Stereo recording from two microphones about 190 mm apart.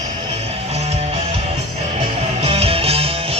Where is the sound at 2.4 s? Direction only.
30° right (ahead or behind).